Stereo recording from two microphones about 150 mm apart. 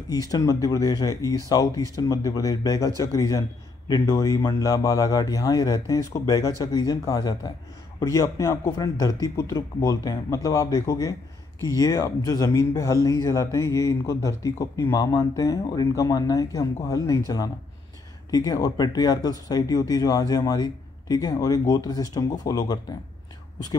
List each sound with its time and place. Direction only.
0.1 s speech: 25° left (ahead or behind)
18.3 s speech: 25° left (ahead or behind)